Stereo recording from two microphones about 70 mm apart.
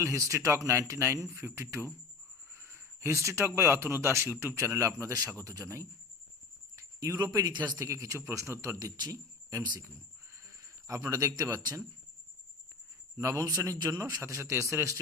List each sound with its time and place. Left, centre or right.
0.0 s speech: right
7.9 s speech: right
9.0 s speech: right
13.1 s speech: right
13.7 s speech: right
14.0 s speech: right